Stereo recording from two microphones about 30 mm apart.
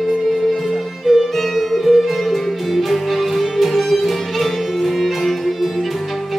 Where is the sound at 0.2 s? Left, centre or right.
Centre.